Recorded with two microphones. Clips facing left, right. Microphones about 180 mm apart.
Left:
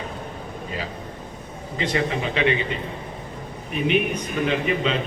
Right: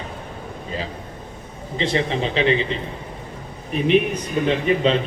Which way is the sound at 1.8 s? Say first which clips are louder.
Right 2 dB; 30° right (ahead or behind).